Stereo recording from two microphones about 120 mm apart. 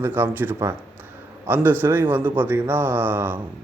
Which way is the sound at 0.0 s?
15° right (ahead or behind).